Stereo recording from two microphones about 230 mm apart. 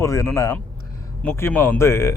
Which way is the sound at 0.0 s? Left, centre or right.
Centre.